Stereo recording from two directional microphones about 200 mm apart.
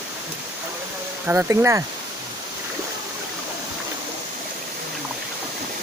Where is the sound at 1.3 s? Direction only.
10° right (ahead or behind).